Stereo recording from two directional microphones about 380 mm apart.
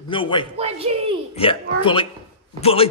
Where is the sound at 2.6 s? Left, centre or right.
Centre.